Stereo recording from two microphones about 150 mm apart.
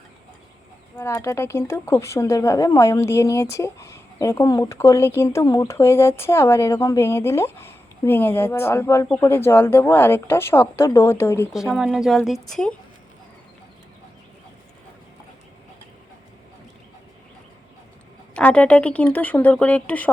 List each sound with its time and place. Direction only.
0.9 s speech: 15° left (ahead or behind)
11.5 s speech: 5° right (ahead or behind)
18.3 s speech: 10° left (ahead or behind)